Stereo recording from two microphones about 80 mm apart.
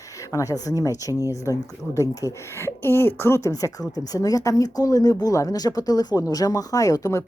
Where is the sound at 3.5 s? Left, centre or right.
Left.